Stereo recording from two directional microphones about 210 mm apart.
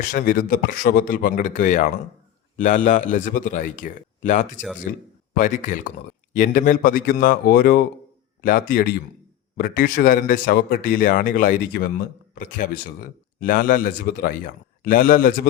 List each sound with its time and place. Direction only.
0.0 s a man's voice: 40° left (ahead or behind)